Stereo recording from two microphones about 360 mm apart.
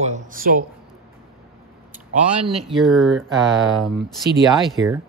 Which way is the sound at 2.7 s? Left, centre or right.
Centre.